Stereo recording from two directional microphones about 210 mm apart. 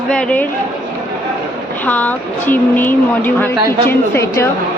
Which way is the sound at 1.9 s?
10° left (ahead or behind).